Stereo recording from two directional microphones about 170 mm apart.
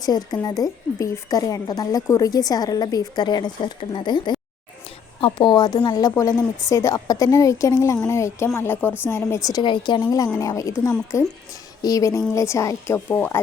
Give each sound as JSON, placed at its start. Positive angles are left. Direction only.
{"t": 0.0, "sound": "a woman's voice", "side_deg": 25}